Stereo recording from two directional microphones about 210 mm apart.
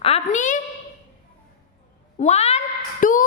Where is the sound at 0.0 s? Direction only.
30° left (ahead or behind).